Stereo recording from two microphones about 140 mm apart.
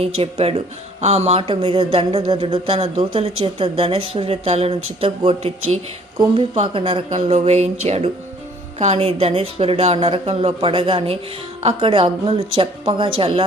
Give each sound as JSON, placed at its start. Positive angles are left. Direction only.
{"t": 0.0, "sound": "speech", "side_deg": -45}
{"t": 7.2, "sound": "a woman's voice", "side_deg": -55}